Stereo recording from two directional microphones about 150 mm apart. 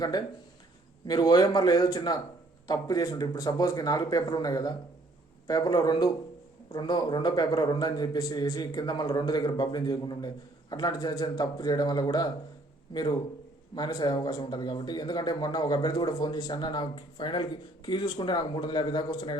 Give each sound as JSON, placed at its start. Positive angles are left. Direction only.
{"t": 0.0, "sound": "a man's voice", "side_deg": 25}